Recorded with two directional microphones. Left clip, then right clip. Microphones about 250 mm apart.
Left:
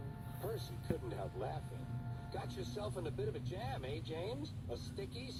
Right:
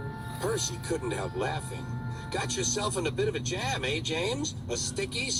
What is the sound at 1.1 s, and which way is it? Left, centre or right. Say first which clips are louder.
Speech: right 12 dB; right.